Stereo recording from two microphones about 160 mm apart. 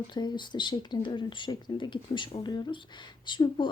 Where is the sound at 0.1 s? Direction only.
25° left (ahead or behind).